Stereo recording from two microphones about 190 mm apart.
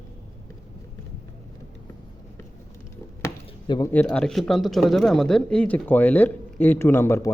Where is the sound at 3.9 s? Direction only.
5° left (ahead or behind).